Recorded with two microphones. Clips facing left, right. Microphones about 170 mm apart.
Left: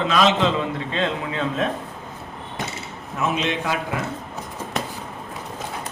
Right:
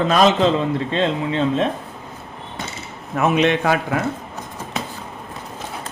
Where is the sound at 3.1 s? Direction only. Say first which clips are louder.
Right 7 dB; 60° right (ahead or behind).